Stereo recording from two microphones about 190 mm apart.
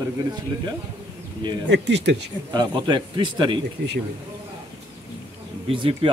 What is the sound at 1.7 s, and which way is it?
Speech, 65° right (ahead or behind).